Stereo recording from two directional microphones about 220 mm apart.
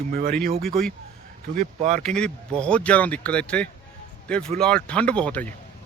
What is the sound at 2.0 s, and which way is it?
Speech, 5° left (ahead or behind).